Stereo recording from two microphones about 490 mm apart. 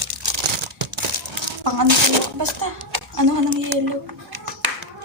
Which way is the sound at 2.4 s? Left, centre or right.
Right.